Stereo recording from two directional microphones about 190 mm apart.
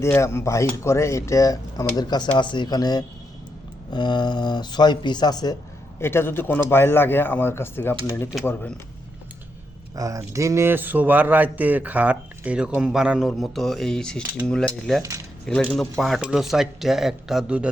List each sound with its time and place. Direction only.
0.0 s a man's voice: 15° left (ahead or behind)
9.9 s speech: 15° right (ahead or behind)